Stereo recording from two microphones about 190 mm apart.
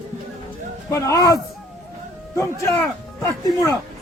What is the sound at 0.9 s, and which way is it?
Speech, 15° left (ahead or behind).